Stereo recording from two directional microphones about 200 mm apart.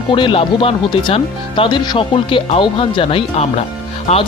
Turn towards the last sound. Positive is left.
turn(degrees=30)  # may be behind; listen again after turning